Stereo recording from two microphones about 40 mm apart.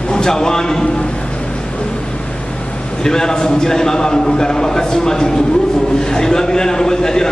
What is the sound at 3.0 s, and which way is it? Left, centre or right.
A man's voice, centre.